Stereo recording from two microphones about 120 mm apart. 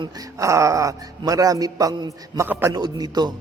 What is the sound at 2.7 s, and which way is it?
Speech, 35° right (ahead or behind).